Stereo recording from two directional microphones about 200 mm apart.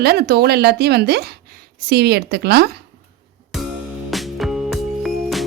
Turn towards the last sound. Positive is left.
turn(degrees=0)  # may be behind; listen again after turning